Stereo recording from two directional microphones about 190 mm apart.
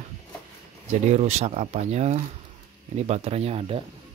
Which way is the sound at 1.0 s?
35° right (ahead or behind).